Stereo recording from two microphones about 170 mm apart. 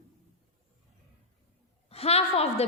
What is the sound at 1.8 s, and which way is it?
Speech, 35° left (ahead or behind).